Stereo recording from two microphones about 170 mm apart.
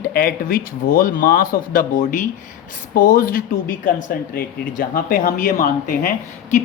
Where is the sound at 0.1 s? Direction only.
60° left (ahead or behind).